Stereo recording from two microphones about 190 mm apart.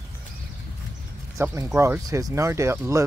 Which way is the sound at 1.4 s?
15° right (ahead or behind).